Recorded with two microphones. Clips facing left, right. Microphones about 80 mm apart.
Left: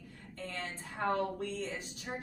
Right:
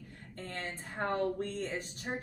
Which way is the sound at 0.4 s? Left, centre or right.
Right.